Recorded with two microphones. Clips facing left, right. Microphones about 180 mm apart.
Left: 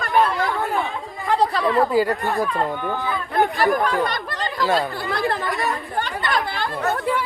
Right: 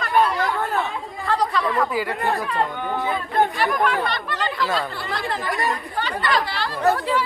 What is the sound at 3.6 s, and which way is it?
Speech, 40° left (ahead or behind).